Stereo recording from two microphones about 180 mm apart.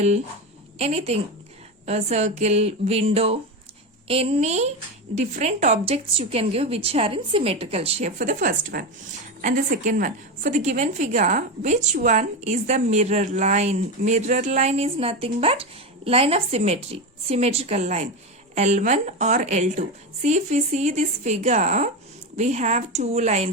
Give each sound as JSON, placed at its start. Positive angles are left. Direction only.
{"t": 0.8, "sound": "a woman's voice", "side_deg": -35}